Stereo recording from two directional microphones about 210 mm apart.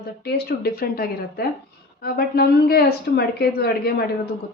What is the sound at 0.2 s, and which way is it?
A woman's voice, 50° left (ahead or behind).